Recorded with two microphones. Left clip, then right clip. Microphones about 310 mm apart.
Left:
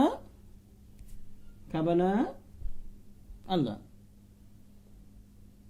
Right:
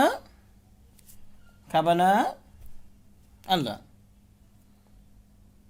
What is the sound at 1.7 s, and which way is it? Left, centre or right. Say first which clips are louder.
Speech: right 8 dB; right.